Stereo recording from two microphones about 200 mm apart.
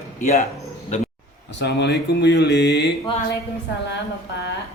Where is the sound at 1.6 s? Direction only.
60° left (ahead or behind).